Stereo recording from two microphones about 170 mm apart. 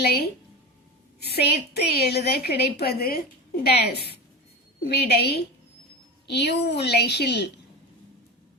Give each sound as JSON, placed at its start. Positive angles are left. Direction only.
{"t": 0.0, "sound": "a woman's voice", "side_deg": 70}